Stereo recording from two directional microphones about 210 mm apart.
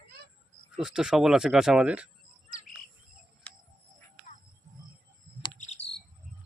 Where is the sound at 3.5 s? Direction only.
5° left (ahead or behind).